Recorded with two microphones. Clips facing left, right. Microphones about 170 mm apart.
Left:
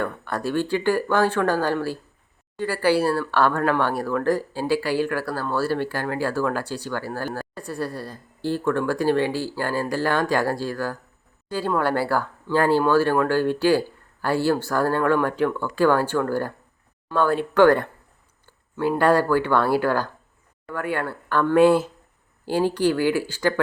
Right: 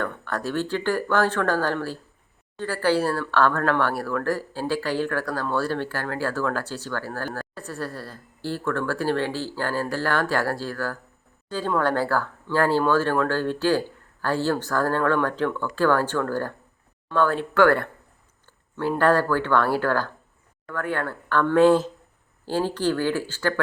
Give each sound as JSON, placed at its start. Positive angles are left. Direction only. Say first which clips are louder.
{"t": 0.0, "sound": "speech", "louder": "left 2 dB", "side_deg": 10}